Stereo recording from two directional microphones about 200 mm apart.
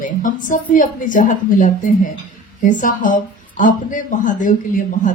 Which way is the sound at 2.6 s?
40° left (ahead or behind).